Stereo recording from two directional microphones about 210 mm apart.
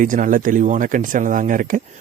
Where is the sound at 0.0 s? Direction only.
40° right (ahead or behind).